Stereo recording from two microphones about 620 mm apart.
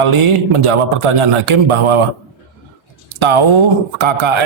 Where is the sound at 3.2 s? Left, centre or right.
Right.